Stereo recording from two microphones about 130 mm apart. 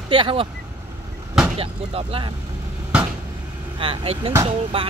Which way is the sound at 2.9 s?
10° right (ahead or behind).